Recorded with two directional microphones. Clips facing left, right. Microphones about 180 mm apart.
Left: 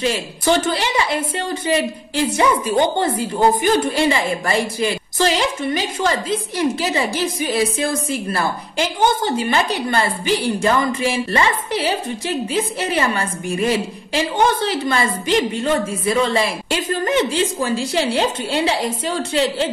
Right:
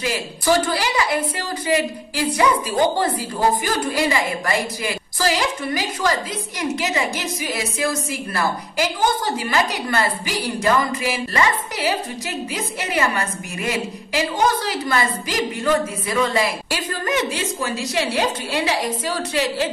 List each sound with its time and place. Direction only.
0.0 s a woman's voice: 25° left (ahead or behind)